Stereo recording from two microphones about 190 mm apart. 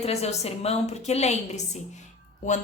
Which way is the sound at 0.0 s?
35° left (ahead or behind).